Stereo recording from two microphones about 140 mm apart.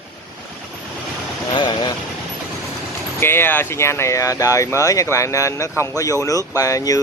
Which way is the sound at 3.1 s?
15° left (ahead or behind).